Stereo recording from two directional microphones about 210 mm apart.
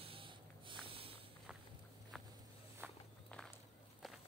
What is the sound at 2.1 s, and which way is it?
Walk, centre (ahead or behind).